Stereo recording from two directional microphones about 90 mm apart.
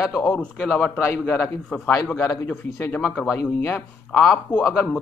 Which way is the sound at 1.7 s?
15° left (ahead or behind).